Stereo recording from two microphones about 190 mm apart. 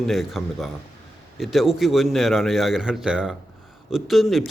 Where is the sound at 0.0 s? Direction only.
Centre (ahead or behind).